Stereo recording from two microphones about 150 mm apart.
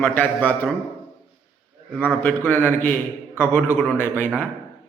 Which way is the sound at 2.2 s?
15° left (ahead or behind).